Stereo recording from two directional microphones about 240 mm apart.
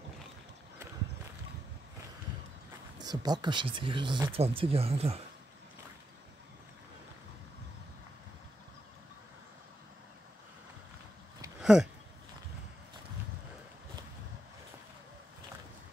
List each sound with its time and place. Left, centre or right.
3.0 s speech: centre
11.6 s speech: centre